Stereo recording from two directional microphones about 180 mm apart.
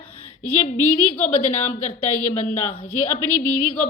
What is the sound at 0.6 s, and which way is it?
A woman's voice, 35° left (ahead or behind).